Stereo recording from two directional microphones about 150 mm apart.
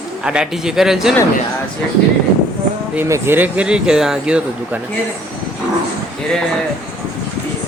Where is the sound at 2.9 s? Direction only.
15° right (ahead or behind).